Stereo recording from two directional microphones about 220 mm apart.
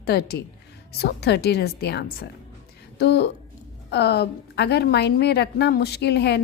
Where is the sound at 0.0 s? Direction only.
45° left (ahead or behind).